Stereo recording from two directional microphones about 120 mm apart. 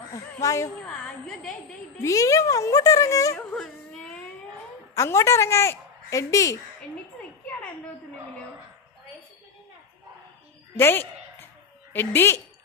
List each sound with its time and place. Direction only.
0.4 s a woman's voice: 25° left (ahead or behind)
0.9 s a woman's voice: 10° left (ahead or behind)
2.0 s a woman's voice: 25° left (ahead or behind)
3.3 s baby cry: 5° left (ahead or behind)
4.9 s a woman's voice: 25° left (ahead or behind)
10.8 s a sound: 20° left (ahead or behind)
11.9 s a woman's voice: 20° left (ahead or behind)